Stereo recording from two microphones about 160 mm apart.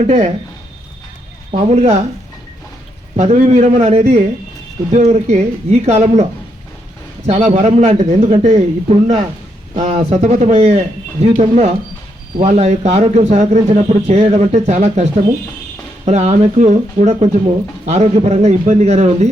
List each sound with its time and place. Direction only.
1.7 s speech: 45° right (ahead or behind)
3.2 s speech: 45° right (ahead or behind)
7.3 s speech: 40° right (ahead or behind)
16.0 s speech: 45° right (ahead or behind)